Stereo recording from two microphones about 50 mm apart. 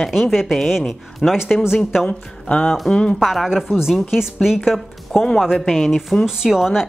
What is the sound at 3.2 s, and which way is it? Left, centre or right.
Speech, centre.